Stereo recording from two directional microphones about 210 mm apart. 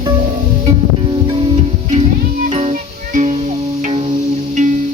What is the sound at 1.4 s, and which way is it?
Music, 30° right (ahead or behind).